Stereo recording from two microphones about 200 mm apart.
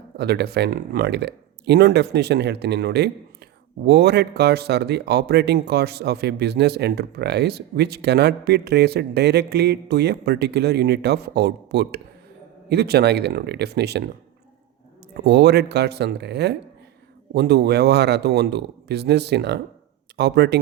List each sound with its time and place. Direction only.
0.2 s speech: 55° right (ahead or behind)
15.1 s speech: 55° right (ahead or behind)